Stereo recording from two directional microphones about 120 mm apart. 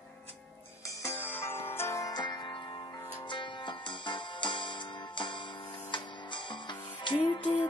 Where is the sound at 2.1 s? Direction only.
40° left (ahead or behind).